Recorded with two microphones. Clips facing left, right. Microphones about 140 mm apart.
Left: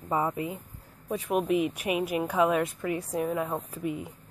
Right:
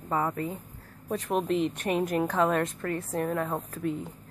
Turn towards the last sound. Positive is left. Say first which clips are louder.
# right 1 dB
turn(degrees=10)  # may be behind; listen again after turning